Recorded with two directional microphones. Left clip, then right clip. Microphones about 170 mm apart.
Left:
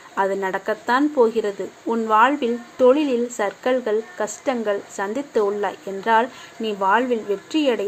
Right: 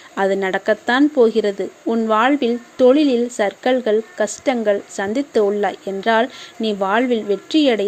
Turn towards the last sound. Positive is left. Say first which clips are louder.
# right 4 dB
turn(degrees=-40)  # may be behind; listen again after turning